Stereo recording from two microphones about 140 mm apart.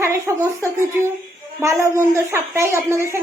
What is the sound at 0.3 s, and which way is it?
Speech, 20° right (ahead or behind).